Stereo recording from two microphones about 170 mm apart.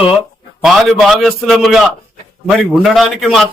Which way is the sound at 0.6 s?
Centre (ahead or behind).